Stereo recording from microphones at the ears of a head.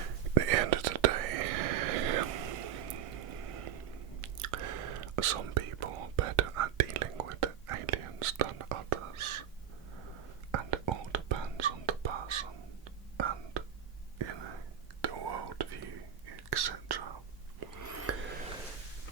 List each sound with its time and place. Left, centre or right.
0.0 s whispering: right